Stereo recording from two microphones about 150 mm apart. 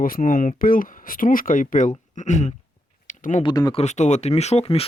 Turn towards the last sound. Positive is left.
turn(degrees=40)  # may be behind; listen again after turning